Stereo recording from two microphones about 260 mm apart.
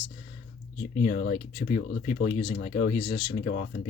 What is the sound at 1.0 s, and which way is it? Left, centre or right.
Speech, left.